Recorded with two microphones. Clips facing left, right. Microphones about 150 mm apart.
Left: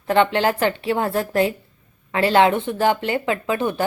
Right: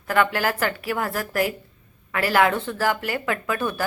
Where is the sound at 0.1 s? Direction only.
25° left (ahead or behind).